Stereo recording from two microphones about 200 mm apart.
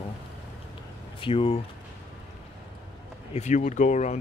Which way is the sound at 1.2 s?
25° left (ahead or behind).